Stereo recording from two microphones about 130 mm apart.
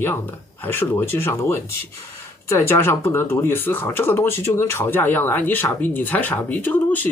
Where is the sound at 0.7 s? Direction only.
15° left (ahead or behind).